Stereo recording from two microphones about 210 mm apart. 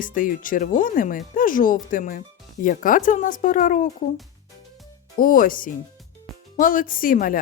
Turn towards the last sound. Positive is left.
turn(degrees=40)  # may be behind; listen again after turning